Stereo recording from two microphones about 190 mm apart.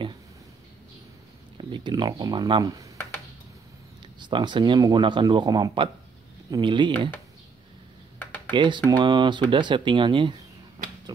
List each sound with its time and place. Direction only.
1.6 s speech: 25° right (ahead or behind)
4.2 s speech: 25° right (ahead or behind)
8.2 s computer keyboard: 10° left (ahead or behind)
8.5 s speech: 25° right (ahead or behind)